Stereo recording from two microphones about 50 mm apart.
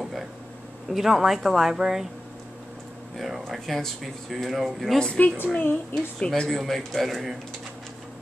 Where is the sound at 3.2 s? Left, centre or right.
Centre.